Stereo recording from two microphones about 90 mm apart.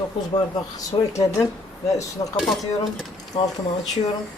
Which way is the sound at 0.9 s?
70° left (ahead or behind).